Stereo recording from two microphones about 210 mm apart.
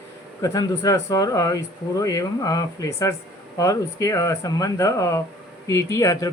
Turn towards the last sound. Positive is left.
turn(degrees=15)  # may be behind; listen again after turning